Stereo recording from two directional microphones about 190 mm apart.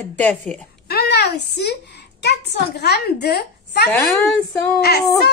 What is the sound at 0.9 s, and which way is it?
A child's voice, 60° left (ahead or behind).